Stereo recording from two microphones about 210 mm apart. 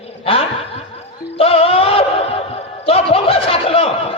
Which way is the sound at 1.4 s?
25° left (ahead or behind).